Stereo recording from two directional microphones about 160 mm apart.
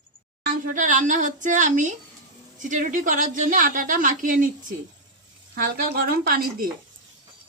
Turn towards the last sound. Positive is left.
turn(degrees=-65)  # may be behind; listen again after turning